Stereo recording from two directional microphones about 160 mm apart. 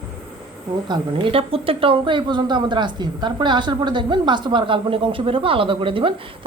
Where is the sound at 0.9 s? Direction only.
35° right (ahead or behind).